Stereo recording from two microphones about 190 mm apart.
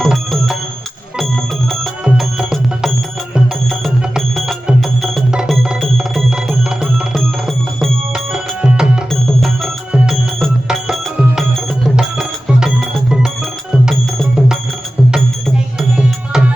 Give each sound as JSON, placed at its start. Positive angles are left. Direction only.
{"t": 0.0, "sound": "music", "side_deg": 0}
{"t": 1.8, "sound": "music", "side_deg": -5}